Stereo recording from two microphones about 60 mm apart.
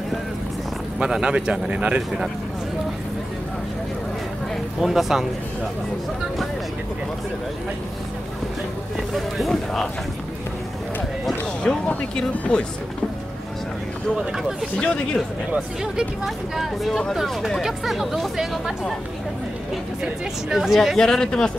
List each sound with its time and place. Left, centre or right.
0.9 s speech: centre
4.7 s speech: centre
9.1 s speech: centre
11.6 s speech: centre
15.5 s speech: centre
16.5 s speech: centre
20.0 s speech: centre
21.0 s speech: centre